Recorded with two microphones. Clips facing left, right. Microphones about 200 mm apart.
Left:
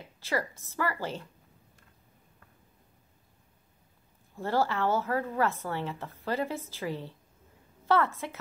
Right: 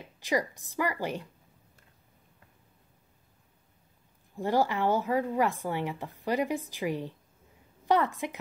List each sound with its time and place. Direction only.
0.2 s a woman's voice: 15° right (ahead or behind)
4.4 s a woman's voice: 15° right (ahead or behind)